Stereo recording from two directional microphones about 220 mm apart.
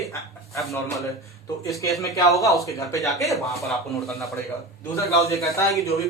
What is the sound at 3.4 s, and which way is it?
Speech, centre (ahead or behind).